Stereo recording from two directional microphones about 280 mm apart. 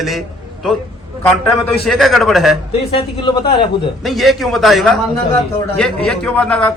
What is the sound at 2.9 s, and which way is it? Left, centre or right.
Speech, centre.